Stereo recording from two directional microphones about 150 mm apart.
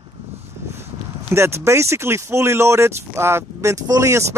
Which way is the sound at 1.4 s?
15° right (ahead or behind).